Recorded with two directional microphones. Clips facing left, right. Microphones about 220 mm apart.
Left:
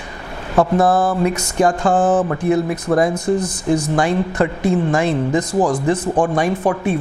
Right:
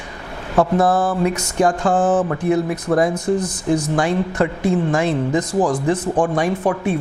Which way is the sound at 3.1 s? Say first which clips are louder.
Left 1 dB; 5° left (ahead or behind).